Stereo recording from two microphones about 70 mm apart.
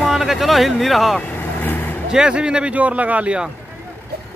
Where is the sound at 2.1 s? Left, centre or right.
Centre.